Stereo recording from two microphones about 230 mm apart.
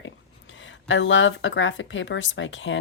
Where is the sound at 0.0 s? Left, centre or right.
Left.